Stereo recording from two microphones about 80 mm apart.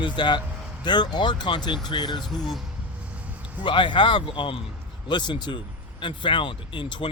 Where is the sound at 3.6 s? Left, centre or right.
Left.